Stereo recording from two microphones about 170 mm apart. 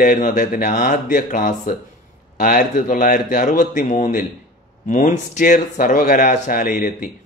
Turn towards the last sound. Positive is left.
turn(degrees=50)  # may be behind; listen again after turning